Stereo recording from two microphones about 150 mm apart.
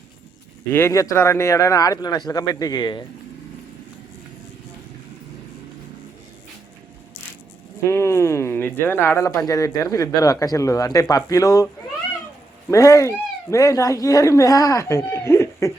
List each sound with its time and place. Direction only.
0.7 s speech: 15° left (ahead or behind)
7.9 s speech: 20° left (ahead or behind)
12.7 s speech: 20° left (ahead or behind)